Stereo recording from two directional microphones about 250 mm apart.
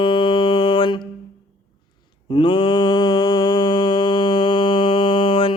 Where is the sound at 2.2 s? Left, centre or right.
Centre.